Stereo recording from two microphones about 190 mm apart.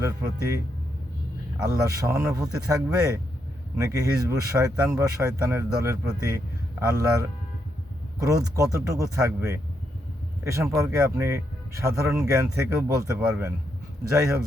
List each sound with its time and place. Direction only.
0.0 s speech: 15° right (ahead or behind)
1.6 s speech: 15° right (ahead or behind)